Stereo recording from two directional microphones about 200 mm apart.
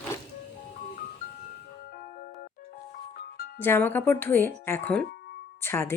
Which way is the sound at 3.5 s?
10° left (ahead or behind).